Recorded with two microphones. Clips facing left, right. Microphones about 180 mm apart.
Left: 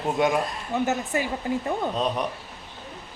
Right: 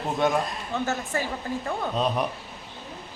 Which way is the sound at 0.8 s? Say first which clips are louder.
Left 2 dB; 20° left (ahead or behind).